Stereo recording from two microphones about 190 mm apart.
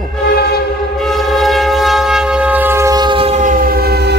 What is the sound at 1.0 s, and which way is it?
Train, centre (ahead or behind).